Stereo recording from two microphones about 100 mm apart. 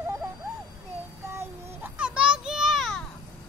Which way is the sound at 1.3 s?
25° right (ahead or behind).